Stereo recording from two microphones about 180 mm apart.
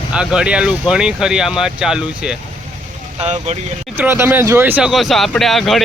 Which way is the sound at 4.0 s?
10° right (ahead or behind).